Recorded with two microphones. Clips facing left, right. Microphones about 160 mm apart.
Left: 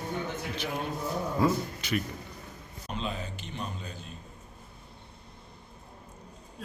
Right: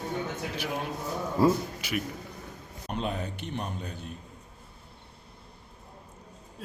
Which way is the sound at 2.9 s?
60° right (ahead or behind).